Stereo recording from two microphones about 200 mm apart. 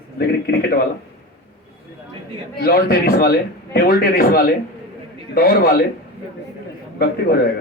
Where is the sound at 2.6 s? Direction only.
50° left (ahead or behind).